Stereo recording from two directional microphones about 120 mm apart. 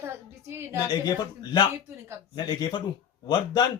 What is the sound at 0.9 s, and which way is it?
Speech, 35° left (ahead or behind).